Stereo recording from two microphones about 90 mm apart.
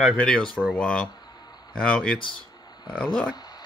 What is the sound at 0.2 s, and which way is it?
Speech, 5° left (ahead or behind).